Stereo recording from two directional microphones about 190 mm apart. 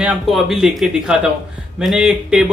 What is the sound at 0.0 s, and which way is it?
Speech, centre (ahead or behind).